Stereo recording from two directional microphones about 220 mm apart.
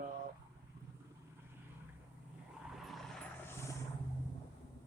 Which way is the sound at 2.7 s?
Centre (ahead or behind).